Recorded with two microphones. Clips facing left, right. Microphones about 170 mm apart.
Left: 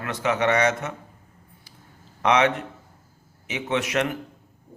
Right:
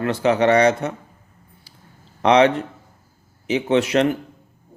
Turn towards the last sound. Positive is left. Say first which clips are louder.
# right 7 dB
turn(degrees=-30)  # may be behind; listen again after turning